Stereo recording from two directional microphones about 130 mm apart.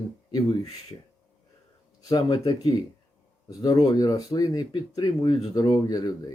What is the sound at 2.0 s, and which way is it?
Speech, 30° left (ahead or behind).